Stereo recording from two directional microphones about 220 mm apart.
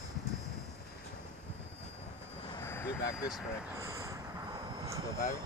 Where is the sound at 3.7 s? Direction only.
15° right (ahead or behind).